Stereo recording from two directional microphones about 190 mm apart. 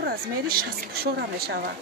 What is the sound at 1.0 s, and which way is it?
Speech, 55° right (ahead or behind).